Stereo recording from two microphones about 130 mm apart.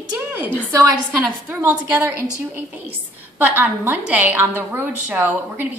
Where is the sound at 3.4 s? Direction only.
15° right (ahead or behind).